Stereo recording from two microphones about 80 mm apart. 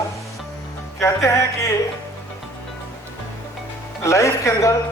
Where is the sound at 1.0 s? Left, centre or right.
Left.